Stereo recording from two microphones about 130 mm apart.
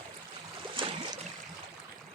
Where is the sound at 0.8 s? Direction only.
40° right (ahead or behind).